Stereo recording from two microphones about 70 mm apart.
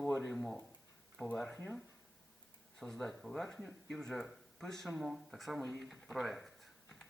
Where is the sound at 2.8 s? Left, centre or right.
Centre.